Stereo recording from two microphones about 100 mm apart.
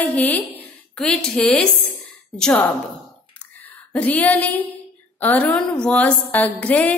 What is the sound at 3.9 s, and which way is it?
A woman's voice, 15° left (ahead or behind).